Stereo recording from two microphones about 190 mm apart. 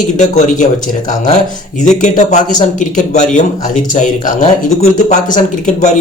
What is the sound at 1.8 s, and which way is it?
Speech, 40° left (ahead or behind).